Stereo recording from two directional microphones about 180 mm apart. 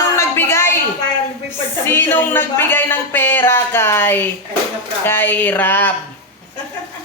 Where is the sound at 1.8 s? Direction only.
10° left (ahead or behind).